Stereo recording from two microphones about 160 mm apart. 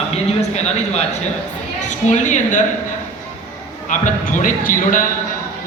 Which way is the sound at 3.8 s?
50° left (ahead or behind).